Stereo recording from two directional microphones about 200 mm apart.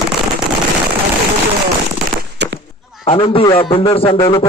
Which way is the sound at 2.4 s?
60° right (ahead or behind).